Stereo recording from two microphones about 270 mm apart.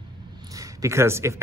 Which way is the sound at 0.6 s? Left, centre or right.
Centre.